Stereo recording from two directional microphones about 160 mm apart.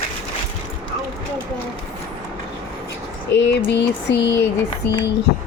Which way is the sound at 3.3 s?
90° left.